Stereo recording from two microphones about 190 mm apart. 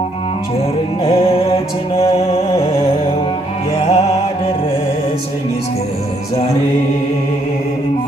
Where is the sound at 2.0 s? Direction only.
30° left (ahead or behind).